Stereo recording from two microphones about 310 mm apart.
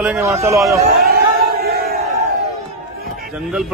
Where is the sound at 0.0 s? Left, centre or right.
Centre.